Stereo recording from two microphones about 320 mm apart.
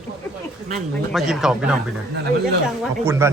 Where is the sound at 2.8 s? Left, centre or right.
Centre.